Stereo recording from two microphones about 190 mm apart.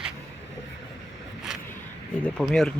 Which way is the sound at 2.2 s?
5° left (ahead or behind).